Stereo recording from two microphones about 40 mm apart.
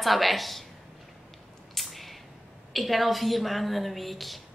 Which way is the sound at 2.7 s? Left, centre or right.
Centre.